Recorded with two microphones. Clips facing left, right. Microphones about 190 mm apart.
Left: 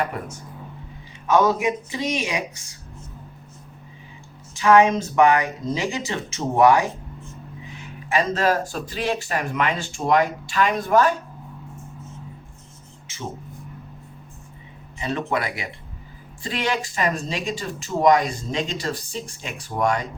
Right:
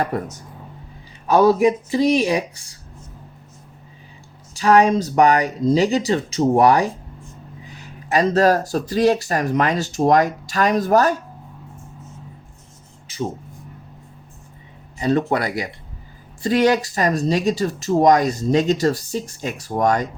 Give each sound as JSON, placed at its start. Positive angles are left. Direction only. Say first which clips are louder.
{"t": 0.0, "sound": "speech", "louder": "right 4 dB", "side_deg": -40}
{"t": 4.5, "sound": "speech", "louder": "right 1 dB", "side_deg": -35}
{"t": 14.9, "sound": "speech", "louder": "right 6 dB", "side_deg": -40}